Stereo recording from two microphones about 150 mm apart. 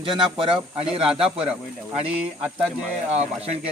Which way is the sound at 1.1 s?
5° right (ahead or behind).